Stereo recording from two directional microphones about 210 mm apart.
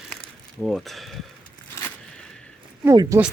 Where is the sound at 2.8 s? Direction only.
15° right (ahead or behind).